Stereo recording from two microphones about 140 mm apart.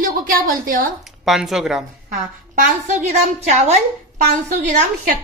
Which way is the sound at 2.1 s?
65° right (ahead or behind).